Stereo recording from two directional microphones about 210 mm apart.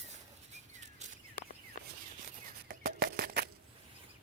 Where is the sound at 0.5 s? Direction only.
35° right (ahead or behind).